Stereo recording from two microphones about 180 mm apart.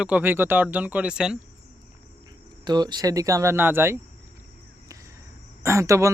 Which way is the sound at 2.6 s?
25° right (ahead or behind).